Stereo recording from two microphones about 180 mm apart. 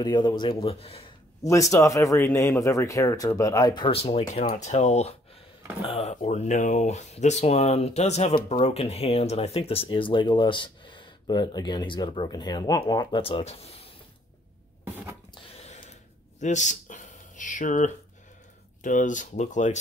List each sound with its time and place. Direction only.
0.0 s speech: 25° left (ahead or behind)
1.4 s speech: 20° left (ahead or behind); by 13.8 s 35° left (ahead or behind)
15.3 s a sound: 35° left (ahead or behind)
18.8 s speech: 45° left (ahead or behind)